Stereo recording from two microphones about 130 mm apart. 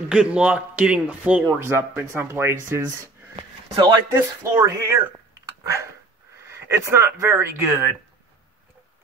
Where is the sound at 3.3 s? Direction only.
40° right (ahead or behind).